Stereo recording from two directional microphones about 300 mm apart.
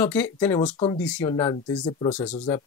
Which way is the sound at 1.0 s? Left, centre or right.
Centre.